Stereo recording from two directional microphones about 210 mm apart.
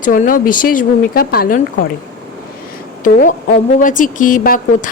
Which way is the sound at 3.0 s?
40° left (ahead or behind).